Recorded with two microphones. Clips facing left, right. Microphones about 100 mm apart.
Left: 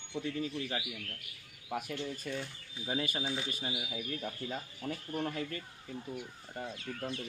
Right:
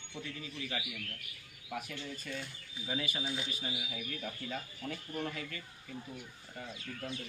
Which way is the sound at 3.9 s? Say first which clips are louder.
Left 3 dB; 25° left (ahead or behind).